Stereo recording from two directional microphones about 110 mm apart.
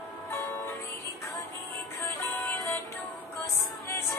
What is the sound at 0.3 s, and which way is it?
Music, 20° left (ahead or behind).